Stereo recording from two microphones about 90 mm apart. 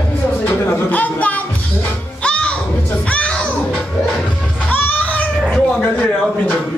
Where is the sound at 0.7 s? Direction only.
20° left (ahead or behind).